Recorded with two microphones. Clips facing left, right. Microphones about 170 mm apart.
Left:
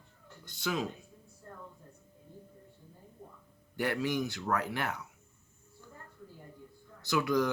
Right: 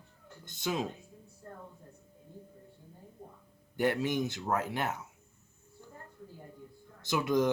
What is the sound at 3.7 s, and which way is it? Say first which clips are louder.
Speech: right 2 dB; 20° right (ahead or behind).